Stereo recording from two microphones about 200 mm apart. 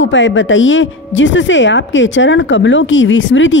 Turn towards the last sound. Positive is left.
turn(degrees=70)  # may be behind; listen again after turning